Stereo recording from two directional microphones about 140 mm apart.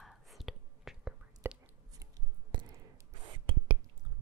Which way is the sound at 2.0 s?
25° right (ahead or behind).